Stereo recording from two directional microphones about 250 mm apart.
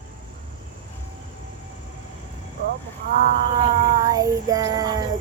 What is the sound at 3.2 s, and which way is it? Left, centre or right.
Speech, left.